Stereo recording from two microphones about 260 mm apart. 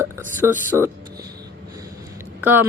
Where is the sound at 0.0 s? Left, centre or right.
Centre.